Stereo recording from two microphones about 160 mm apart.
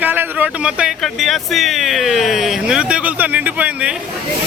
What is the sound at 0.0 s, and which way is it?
Speech, 10° right (ahead or behind).